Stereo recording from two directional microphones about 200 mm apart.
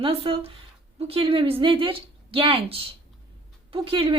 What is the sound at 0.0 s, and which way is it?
A woman's voice, 25° right (ahead or behind).